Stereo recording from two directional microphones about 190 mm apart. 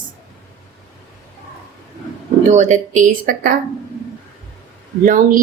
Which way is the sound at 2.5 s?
40° right (ahead or behind).